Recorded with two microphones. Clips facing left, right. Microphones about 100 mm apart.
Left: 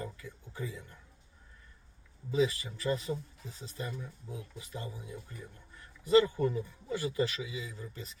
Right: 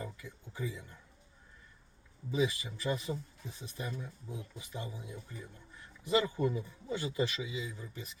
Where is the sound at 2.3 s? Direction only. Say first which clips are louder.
Left 3 dB; 20° right (ahead or behind).